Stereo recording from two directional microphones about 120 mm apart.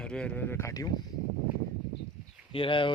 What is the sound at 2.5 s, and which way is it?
Speech, 45° left (ahead or behind).